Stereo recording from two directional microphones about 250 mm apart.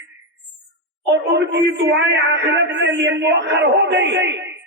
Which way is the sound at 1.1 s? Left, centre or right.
Right.